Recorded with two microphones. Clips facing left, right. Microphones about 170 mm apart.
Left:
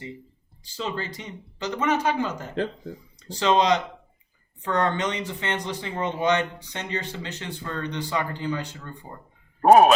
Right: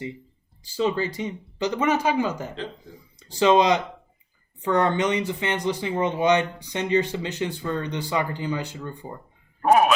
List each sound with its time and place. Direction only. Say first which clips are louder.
0.6 s speech: right 7 dB; 10° right (ahead or behind)
9.6 s a man's voice: left 4 dB; 35° left (ahead or behind)